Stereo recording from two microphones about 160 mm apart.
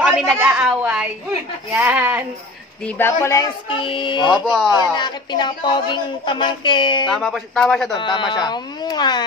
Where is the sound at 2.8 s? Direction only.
10° left (ahead or behind).